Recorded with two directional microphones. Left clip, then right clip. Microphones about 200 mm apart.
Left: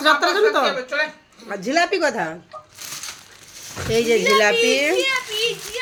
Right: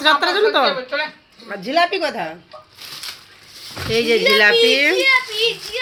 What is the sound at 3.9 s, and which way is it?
A woman's voice, 5° left (ahead or behind).